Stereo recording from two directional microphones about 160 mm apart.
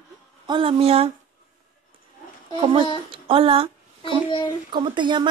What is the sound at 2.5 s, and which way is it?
A woman's voice, 35° right (ahead or behind).